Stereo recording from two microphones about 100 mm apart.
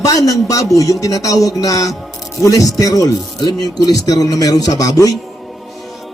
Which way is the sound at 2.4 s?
35° left (ahead or behind).